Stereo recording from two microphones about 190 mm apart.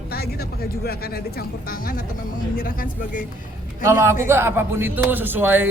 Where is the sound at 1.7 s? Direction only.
50° left (ahead or behind).